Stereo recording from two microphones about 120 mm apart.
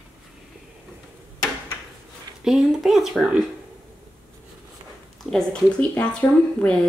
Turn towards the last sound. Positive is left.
turn(degrees=10)  # may be behind; listen again after turning